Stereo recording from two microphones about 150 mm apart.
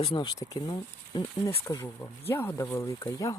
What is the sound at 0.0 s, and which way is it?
Speech, 35° left (ahead or behind).